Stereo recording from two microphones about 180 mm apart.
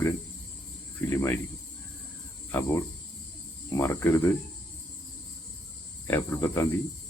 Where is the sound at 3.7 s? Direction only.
15° left (ahead or behind).